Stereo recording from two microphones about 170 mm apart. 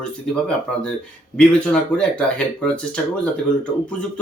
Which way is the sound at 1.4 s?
5° left (ahead or behind).